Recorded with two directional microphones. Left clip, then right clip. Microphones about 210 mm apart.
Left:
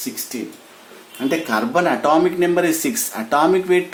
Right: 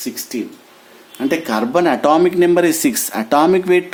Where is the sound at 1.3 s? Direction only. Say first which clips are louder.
Right 2 dB; 50° right (ahead or behind).